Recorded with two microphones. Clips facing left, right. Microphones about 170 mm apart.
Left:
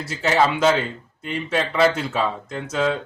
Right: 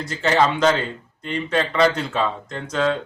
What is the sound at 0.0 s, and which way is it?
A man's voice, 5° left (ahead or behind).